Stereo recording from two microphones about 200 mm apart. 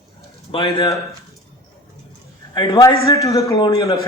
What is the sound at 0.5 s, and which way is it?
Speech, 20° left (ahead or behind).